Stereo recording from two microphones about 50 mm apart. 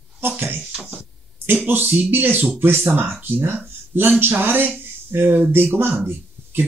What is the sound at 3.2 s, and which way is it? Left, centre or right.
Speech, right.